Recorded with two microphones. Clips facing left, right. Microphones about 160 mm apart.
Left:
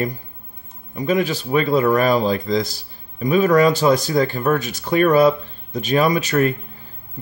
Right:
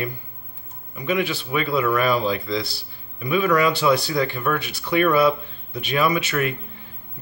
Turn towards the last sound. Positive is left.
turn(degrees=40)  # may be behind; listen again after turning